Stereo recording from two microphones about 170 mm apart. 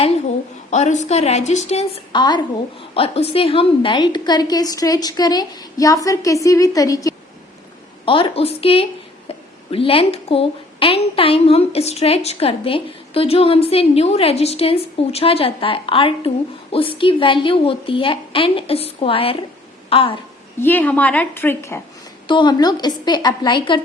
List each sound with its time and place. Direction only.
0.7 s a woman's voice: 45° left (ahead or behind)
2.1 s a woman's voice: 25° left (ahead or behind)
8.0 s a woman's voice: 30° left (ahead or behind)
19.9 s a sound: 35° left (ahead or behind)
20.6 s a woman's voice: 10° left (ahead or behind)
22.3 s a woman's voice: 25° left (ahead or behind)